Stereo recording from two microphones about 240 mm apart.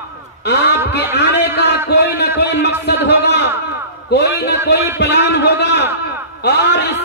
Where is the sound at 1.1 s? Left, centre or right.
Left.